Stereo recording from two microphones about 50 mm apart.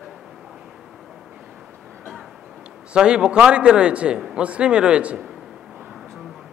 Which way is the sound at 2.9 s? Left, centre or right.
Centre.